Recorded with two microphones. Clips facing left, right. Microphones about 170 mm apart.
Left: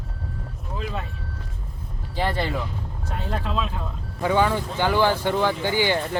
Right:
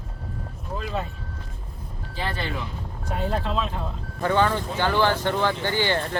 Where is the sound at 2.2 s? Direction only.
35° left (ahead or behind).